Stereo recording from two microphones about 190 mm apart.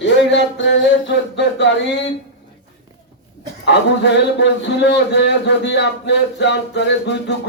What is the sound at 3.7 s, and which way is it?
A man's voice, 65° left (ahead or behind).